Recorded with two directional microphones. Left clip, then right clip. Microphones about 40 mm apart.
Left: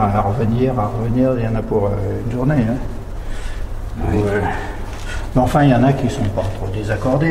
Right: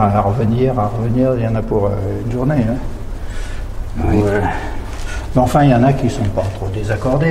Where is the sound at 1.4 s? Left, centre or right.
Right.